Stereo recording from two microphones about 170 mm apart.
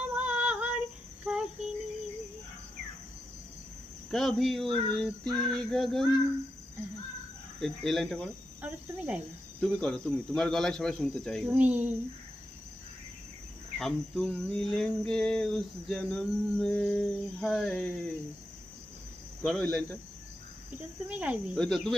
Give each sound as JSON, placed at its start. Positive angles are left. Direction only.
{"t": 0.2, "sound": "female singing", "side_deg": -5}
{"t": 1.2, "sound": "cricket", "side_deg": -5}
{"t": 4.1, "sound": "cricket", "side_deg": 0}
{"t": 7.6, "sound": "cricket", "side_deg": 0}
{"t": 8.6, "sound": "cricket", "side_deg": -10}
{"t": 9.6, "sound": "cricket", "side_deg": 0}
{"t": 11.4, "sound": "speech", "side_deg": -10}
{"t": 13.7, "sound": "cricket", "side_deg": 0}
{"t": 19.4, "sound": "cricket", "side_deg": 5}
{"t": 21.1, "sound": "speech", "side_deg": -10}
{"t": 21.5, "sound": "cricket", "side_deg": 0}